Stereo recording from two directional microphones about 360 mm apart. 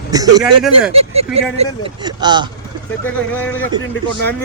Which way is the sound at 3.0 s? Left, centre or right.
Centre.